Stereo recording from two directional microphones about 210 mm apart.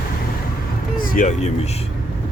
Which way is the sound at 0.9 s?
40° left (ahead or behind).